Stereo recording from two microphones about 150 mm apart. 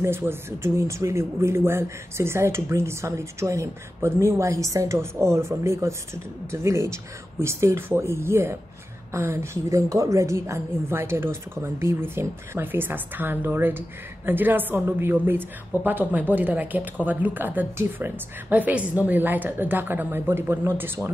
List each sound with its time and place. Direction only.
0.0 s a woman's voice: 15° right (ahead or behind)